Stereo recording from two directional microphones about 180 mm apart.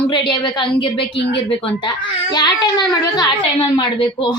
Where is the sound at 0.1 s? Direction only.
25° left (ahead or behind).